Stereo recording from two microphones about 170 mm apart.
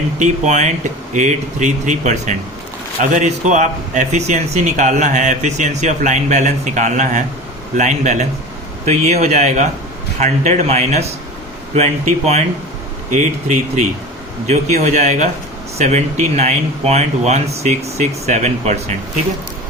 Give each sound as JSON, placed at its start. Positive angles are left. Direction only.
{"t": 0.2, "sound": "speech", "side_deg": -45}